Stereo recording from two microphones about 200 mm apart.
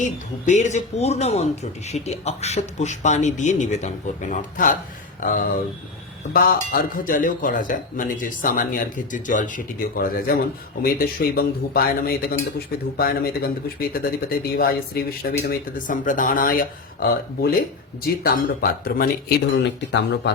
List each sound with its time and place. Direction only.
0.4 s a man's voice: 35° left (ahead or behind)
19.9 s speech: 60° left (ahead or behind)